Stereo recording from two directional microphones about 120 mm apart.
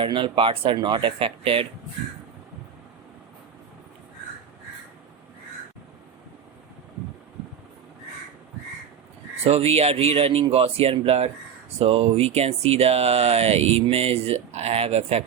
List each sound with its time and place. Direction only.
0.0 s speech: 45° right (ahead or behind)
9.4 s speech: 55° right (ahead or behind)